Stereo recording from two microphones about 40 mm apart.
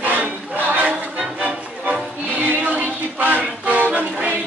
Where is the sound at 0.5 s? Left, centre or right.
Right.